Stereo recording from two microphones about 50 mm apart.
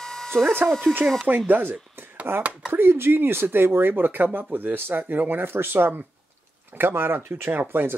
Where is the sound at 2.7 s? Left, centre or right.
Right.